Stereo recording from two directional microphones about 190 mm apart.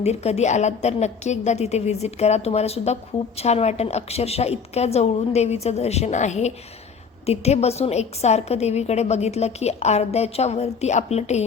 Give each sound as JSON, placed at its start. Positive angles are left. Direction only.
{"t": 0.0, "sound": "a woman's voice", "side_deg": 35}